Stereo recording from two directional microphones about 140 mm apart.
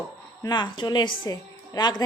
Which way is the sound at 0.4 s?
30° left (ahead or behind).